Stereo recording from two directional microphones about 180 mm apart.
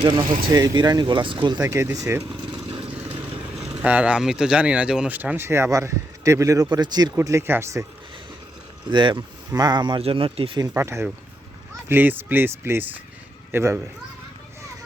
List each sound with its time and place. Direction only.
0.0 s speech: 25° right (ahead or behind)
2.9 s speech: 5° right (ahead or behind)
8.9 s speech: 25° right (ahead or behind)
10.6 s a child's voice: 15° right (ahead or behind)